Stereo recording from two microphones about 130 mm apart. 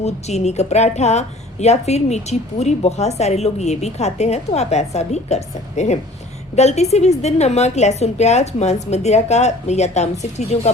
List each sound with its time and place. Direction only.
0.0 s a woman's voice: 55° left (ahead or behind)